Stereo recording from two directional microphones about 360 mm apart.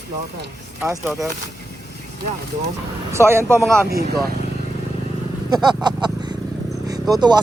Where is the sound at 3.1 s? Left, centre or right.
Centre.